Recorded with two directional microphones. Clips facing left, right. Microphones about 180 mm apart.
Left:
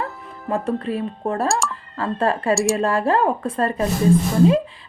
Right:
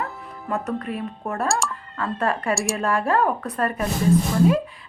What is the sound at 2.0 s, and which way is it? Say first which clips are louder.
Speech: left 3 dB; 30° left (ahead or behind).